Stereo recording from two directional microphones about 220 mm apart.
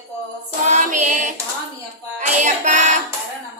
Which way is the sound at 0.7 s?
35° right (ahead or behind).